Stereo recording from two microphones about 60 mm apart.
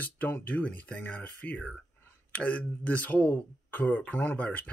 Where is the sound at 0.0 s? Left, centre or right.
Left.